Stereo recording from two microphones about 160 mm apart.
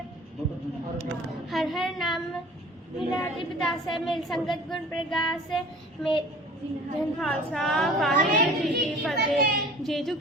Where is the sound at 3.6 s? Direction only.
Centre (ahead or behind).